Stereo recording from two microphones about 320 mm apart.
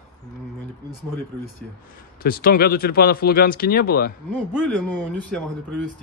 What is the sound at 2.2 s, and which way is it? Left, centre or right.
A man's voice, left.